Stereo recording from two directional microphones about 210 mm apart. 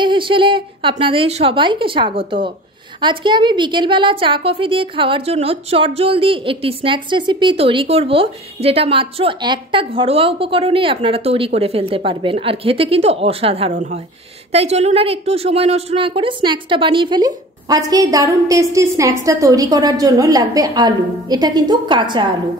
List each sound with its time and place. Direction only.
0.0 s a woman's voice: 25° right (ahead or behind)